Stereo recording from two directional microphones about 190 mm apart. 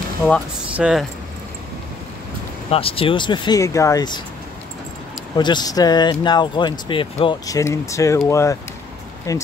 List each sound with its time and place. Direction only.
0.7 s speech: 5° right (ahead or behind)
2.7 s speech: 30° left (ahead or behind)
5.4 s speech: 20° left (ahead or behind)